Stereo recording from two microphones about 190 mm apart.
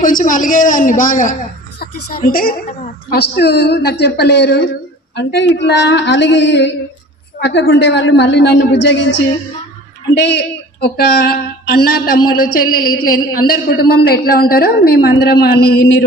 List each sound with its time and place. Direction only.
0.0 s a woman's voice: 45° left (ahead or behind); by 9.1 s 70° left (ahead or behind)
10.2 s speech: 60° left (ahead or behind)